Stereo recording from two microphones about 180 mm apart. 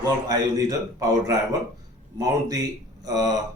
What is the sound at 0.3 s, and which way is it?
A man's voice, 20° right (ahead or behind).